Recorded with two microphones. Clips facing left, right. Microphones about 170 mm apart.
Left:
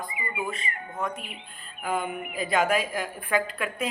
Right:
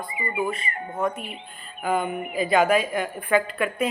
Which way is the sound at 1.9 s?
Centre (ahead or behind).